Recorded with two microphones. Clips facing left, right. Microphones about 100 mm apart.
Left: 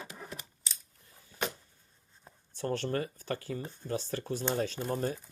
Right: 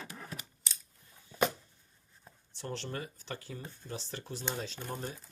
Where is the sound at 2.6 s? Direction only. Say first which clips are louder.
Left 7 dB; 50° left (ahead or behind).